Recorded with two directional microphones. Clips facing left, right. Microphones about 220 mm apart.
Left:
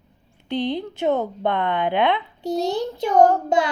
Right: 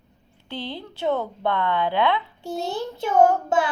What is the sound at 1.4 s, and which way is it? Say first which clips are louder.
Speech: right 1 dB; 15° left (ahead or behind).